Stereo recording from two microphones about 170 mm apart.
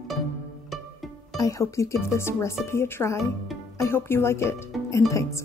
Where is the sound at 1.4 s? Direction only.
20° left (ahead or behind).